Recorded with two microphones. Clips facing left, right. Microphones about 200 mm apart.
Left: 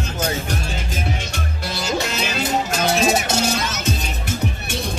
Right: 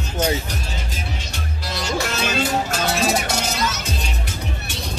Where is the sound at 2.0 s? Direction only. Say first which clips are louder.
Right 4 dB; 15° left (ahead or behind).